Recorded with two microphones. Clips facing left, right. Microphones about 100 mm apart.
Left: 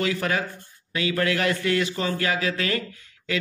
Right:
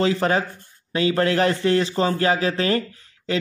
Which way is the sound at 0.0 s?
30° right (ahead or behind).